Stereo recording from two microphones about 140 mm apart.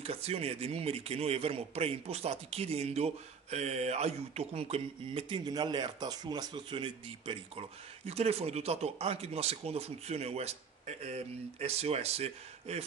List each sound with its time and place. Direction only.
0.0 s speech: 45° right (ahead or behind)